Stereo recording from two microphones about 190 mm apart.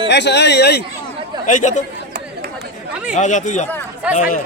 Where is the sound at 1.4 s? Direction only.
40° left (ahead or behind).